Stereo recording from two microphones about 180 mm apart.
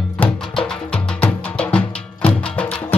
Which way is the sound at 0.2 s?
5° left (ahead or behind).